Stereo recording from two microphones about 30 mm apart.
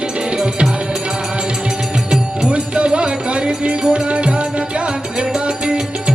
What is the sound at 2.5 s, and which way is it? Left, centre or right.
Music, right.